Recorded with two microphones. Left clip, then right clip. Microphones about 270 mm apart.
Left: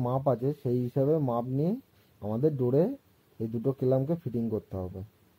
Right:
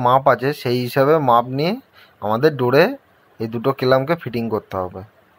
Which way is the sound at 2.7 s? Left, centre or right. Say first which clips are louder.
Right 12 dB; right.